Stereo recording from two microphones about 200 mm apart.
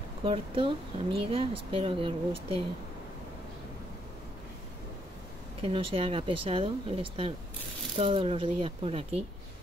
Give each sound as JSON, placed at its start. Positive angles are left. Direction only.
{"t": 0.2, "sound": "speech", "side_deg": -25}
{"t": 5.6, "sound": "speech", "side_deg": -25}